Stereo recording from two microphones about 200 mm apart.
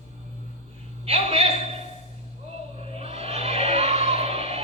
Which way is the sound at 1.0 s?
30° right (ahead or behind).